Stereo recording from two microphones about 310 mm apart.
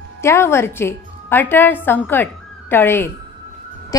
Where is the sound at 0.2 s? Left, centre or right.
Centre.